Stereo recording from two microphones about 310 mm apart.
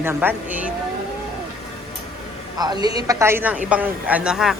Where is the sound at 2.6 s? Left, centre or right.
Centre.